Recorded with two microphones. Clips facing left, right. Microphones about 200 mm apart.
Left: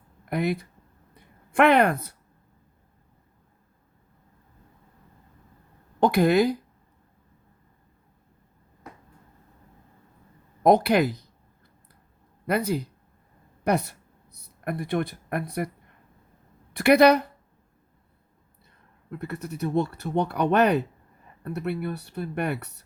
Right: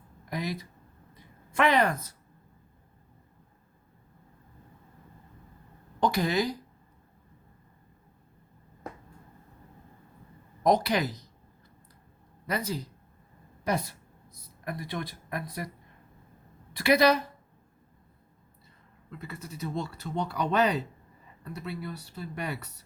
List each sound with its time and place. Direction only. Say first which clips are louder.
0.3 s speech: left 8 dB; 60° left (ahead or behind)
1.5 s speech: left 6 dB; 60° left (ahead or behind)
6.0 s speech: left 7 dB; 55° left (ahead or behind)
10.6 s speech: left 6 dB; 60° left (ahead or behind)
12.5 s speech: left 7 dB; 55° left (ahead or behind)
14.6 s speech: left 8 dB; 55° left (ahead or behind)
16.8 s speech: left 6 dB; 60° left (ahead or behind)
19.1 s speech: left 8 dB; 60° left (ahead or behind)